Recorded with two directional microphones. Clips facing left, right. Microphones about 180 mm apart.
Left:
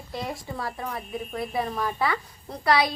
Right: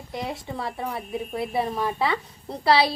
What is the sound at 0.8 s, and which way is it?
Speech, 10° right (ahead or behind).